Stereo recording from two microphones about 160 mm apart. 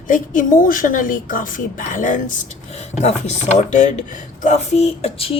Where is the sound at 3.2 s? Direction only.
45° left (ahead or behind).